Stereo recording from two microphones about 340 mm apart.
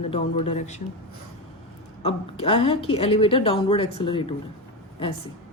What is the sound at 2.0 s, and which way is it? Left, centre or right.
A woman's voice, centre.